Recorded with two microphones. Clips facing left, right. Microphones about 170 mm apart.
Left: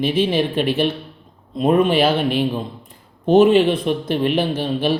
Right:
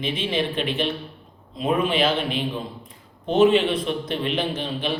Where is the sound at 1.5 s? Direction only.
45° left (ahead or behind).